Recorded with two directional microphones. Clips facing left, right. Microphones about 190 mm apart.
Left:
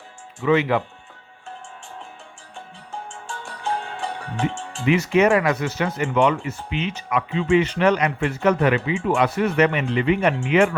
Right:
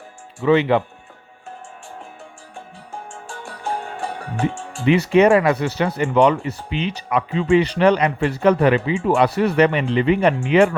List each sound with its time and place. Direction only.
0.4 s speech: 30° right (ahead or behind)
4.2 s music: 10° right (ahead or behind)
4.9 s speech: 35° right (ahead or behind)